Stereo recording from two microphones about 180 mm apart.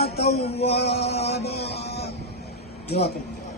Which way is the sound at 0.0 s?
65° left (ahead or behind).